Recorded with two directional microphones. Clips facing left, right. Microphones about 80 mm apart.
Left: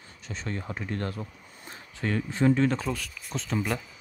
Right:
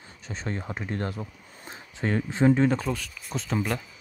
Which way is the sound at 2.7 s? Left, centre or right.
Centre.